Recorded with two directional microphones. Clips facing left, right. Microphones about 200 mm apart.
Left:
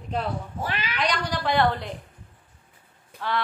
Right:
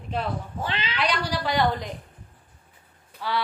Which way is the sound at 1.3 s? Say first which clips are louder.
Left 2 dB; 10° right (ahead or behind).